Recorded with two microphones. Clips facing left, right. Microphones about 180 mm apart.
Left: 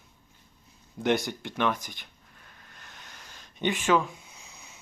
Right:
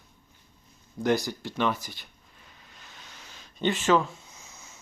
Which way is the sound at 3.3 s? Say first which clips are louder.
Right 2 dB; 15° left (ahead or behind).